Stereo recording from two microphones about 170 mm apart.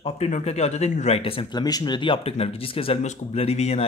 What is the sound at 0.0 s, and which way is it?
Speech, 40° left (ahead or behind).